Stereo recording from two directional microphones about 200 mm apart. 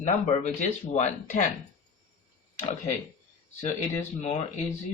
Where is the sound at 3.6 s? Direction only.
35° left (ahead or behind).